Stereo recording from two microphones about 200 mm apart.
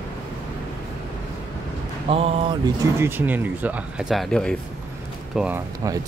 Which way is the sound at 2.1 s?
30° right (ahead or behind).